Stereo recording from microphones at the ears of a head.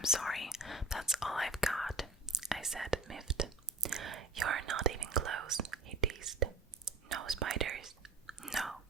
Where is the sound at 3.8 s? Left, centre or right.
Right.